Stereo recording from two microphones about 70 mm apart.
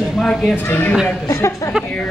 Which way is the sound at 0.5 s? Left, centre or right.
Left.